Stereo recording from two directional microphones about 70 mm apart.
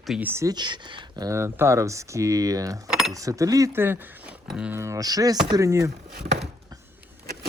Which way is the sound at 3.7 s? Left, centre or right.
Right.